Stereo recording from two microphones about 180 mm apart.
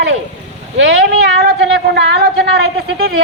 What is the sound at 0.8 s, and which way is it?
A woman's voice, 65° right (ahead or behind).